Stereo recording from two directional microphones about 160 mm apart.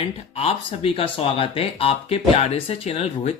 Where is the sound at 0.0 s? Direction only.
40° left (ahead or behind).